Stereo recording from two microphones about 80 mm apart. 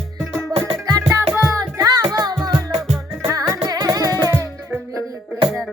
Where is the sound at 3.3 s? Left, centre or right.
Right.